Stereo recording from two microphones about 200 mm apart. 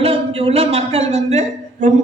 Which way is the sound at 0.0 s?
30° right (ahead or behind).